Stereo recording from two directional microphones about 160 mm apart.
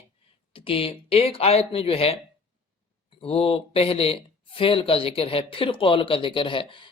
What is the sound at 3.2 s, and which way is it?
Speech, 35° left (ahead or behind).